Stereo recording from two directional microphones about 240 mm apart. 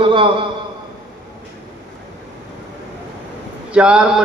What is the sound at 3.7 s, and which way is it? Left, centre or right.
Speech, centre.